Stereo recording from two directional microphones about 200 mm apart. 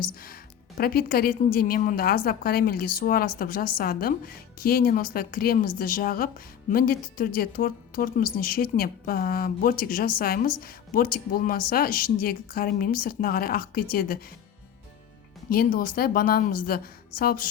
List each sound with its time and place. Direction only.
0.0 s speech: 45° left (ahead or behind)
15.4 s speech: 45° left (ahead or behind)